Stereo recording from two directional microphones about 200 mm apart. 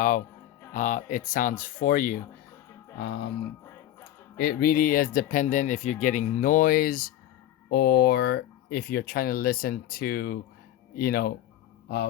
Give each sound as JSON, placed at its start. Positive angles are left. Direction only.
{"t": 0.7, "sound": "speech", "side_deg": 40}
{"t": 3.3, "sound": "music", "side_deg": 10}
{"t": 4.4, "sound": "speech", "side_deg": 50}